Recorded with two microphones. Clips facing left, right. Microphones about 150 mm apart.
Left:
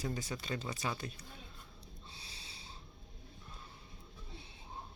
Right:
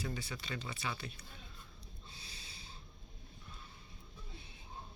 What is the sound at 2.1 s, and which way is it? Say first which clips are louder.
Snort: left 1 dB; 35° left (ahead or behind).